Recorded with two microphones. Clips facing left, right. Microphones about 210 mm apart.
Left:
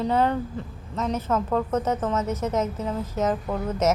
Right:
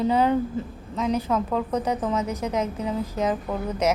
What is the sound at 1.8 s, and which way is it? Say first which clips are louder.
Speech: even; 15° right (ahead or behind).